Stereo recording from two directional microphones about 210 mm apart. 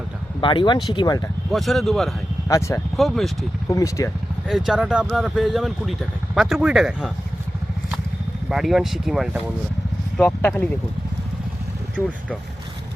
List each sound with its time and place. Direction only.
0.4 s speech: 20° left (ahead or behind)
1.5 s speech: centre (ahead or behind)
2.5 s speech: 15° left (ahead or behind)
2.9 s speech: centre (ahead or behind)
3.7 s speech: 15° left (ahead or behind)
4.4 s speech: centre (ahead or behind)
8.4 s speech: centre (ahead or behind)